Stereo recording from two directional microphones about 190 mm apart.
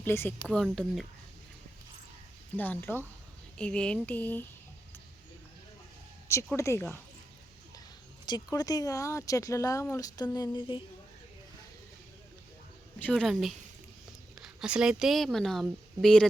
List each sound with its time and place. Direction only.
0.0 s speech: 10° left (ahead or behind)
2.6 s speech: 10° left (ahead or behind)
6.2 s speech: 15° left (ahead or behind)
8.3 s speech: 20° left (ahead or behind)
13.0 s speech: 5° left (ahead or behind)